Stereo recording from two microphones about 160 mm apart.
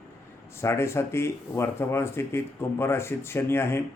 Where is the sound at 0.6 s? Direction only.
15° left (ahead or behind).